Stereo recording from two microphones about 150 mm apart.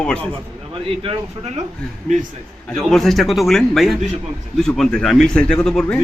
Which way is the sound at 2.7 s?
Centre (ahead or behind).